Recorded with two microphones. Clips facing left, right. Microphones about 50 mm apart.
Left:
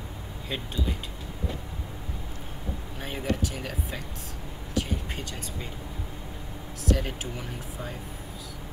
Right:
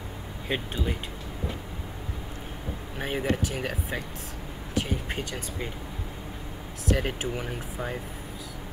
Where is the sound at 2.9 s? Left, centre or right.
Right.